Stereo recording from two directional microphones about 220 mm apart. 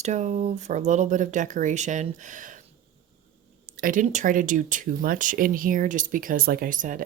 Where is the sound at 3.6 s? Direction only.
35° right (ahead or behind).